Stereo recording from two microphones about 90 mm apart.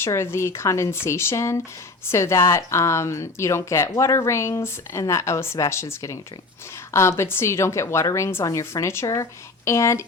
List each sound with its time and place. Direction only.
0.0 s speech: 30° left (ahead or behind)